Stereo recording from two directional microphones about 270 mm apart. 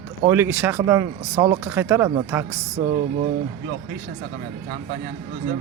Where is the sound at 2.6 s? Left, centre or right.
Right.